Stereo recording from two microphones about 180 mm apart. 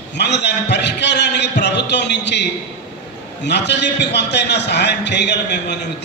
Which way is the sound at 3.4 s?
70° left (ahead or behind).